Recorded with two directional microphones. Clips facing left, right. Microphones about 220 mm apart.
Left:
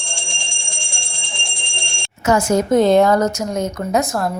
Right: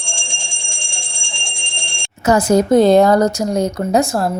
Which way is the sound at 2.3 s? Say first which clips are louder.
Right 3 dB; 35° right (ahead or behind).